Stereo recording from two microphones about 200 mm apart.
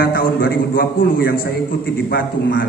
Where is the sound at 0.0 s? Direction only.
45° left (ahead or behind).